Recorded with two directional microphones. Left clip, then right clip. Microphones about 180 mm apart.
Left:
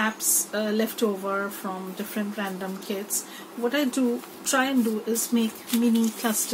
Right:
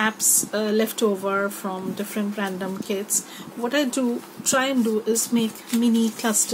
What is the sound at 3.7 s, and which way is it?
A woman's voice, 60° right (ahead or behind).